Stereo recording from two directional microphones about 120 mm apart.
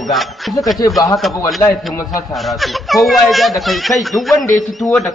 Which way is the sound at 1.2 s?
Centre (ahead or behind).